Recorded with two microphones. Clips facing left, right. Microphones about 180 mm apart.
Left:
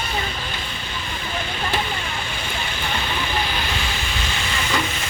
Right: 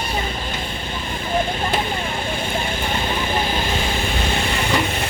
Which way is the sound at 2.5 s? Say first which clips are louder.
Right 4 dB; 45° right (ahead or behind).